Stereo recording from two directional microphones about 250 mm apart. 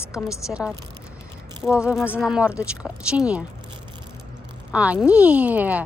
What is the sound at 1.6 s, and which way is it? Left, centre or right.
A woman's voice, centre.